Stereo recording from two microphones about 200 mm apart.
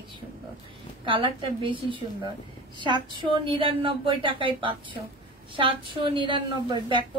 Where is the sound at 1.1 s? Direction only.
25° right (ahead or behind).